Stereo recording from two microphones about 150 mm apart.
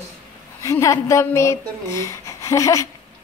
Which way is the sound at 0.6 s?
20° left (ahead or behind).